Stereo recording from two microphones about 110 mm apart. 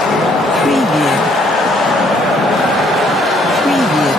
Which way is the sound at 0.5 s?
Centre (ahead or behind).